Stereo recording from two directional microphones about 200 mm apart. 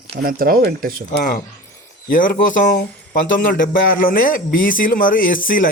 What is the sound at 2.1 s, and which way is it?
A man's voice, 45° left (ahead or behind).